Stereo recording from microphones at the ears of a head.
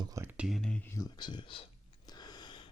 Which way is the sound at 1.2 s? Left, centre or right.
Left.